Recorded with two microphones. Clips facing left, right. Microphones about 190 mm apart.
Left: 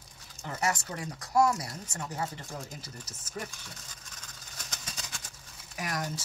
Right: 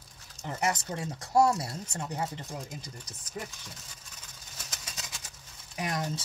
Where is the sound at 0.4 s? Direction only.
20° right (ahead or behind).